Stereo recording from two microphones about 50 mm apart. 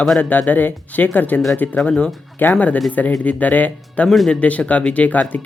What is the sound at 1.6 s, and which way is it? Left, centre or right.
Speech, left.